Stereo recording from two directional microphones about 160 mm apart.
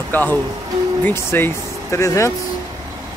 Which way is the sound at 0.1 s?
10° left (ahead or behind).